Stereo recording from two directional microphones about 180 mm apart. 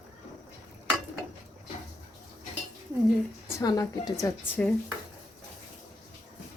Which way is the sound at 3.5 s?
20° left (ahead or behind).